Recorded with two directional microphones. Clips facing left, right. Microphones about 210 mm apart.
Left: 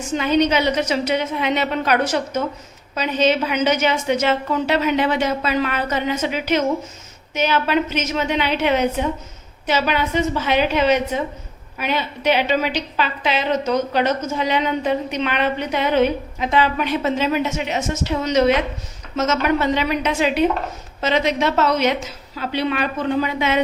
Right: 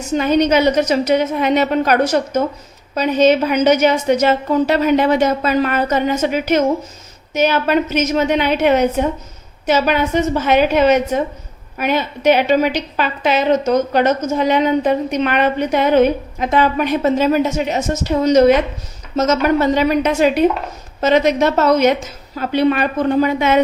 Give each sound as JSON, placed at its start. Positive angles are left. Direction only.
{"t": 0.1, "sound": "a woman's voice", "side_deg": -45}